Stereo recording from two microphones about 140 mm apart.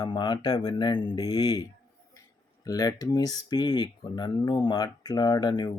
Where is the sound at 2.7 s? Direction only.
25° left (ahead or behind).